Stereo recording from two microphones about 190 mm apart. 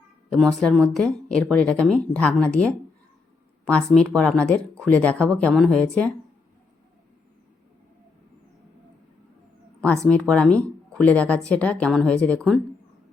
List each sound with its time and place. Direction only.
0.3 s speech: centre (ahead or behind)
9.8 s speech: 5° left (ahead or behind)